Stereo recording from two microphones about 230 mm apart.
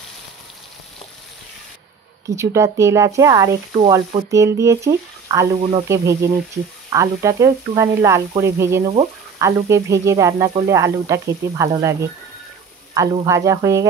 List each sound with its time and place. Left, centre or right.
2.2 s speech: centre
5.6 s speech: right
5.9 s speech: centre